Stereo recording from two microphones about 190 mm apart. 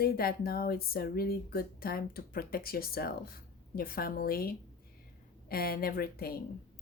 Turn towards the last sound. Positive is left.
turn(degrees=55)  # may be behind; listen again after turning